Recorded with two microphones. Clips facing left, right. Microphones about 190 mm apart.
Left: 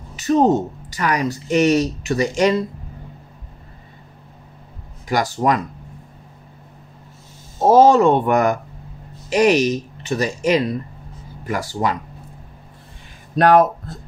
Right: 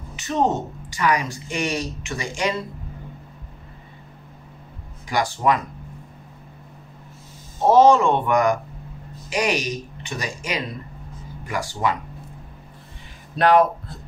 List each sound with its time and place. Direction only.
0.1 s speech: 40° left (ahead or behind)
5.1 s speech: 40° left (ahead or behind)
7.6 s speech: 40° left (ahead or behind)
13.4 s speech: 45° left (ahead or behind)